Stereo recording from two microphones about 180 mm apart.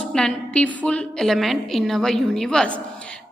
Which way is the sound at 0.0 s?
5° left (ahead or behind).